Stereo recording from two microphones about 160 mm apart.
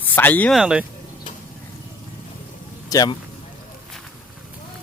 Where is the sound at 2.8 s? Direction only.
25° left (ahead or behind).